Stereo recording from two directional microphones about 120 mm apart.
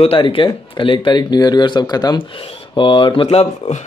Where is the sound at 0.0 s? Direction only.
50° left (ahead or behind); by 2.2 s 35° left (ahead or behind).